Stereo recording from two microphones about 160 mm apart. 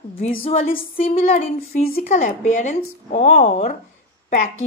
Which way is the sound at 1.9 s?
60° left (ahead or behind).